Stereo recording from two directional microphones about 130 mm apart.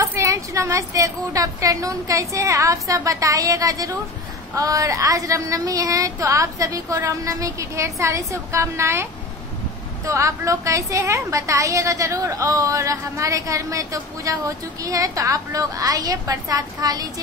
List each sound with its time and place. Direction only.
0.0 s a woman's voice: 25° right (ahead or behind)
10.0 s a woman's voice: 25° right (ahead or behind)